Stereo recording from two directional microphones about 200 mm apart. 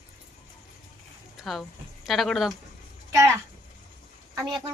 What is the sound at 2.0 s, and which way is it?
Speech, centre (ahead or behind).